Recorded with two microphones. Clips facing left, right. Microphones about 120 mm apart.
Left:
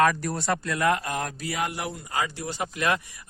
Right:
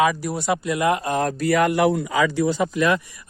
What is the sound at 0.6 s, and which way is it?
Speech, 20° right (ahead or behind).